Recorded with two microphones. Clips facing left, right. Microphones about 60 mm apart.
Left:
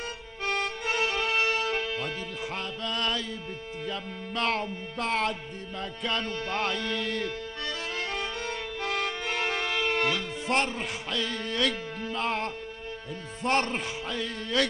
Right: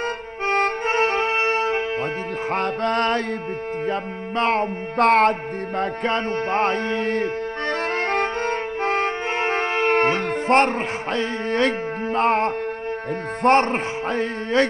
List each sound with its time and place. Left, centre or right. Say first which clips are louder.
0.5 s music: right 9 dB; right
2.5 s music: right 13 dB; right
3.8 s a man's voice: right 7 dB; right
4.9 s music: right 13 dB; right
5.8 s music: right 9 dB; right
13.4 s a man's voice: right 10 dB; right